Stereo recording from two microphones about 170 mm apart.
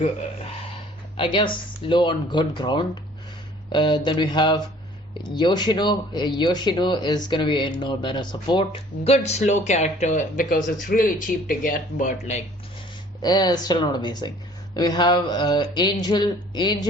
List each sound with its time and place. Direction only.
1.1 s speech: 30° left (ahead or behind)
13.2 s speech: 25° left (ahead or behind)